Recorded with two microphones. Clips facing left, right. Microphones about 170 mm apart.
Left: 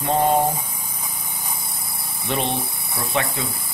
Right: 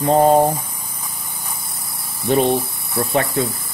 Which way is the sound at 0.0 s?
40° right (ahead or behind).